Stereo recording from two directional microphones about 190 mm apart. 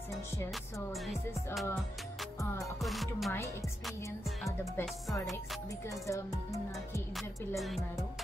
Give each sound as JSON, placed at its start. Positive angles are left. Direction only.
{"t": 1.0, "sound": "music", "side_deg": 0}
{"t": 2.8, "sound": "music", "side_deg": 0}
{"t": 4.5, "sound": "music", "side_deg": 15}
{"t": 7.2, "sound": "music", "side_deg": 0}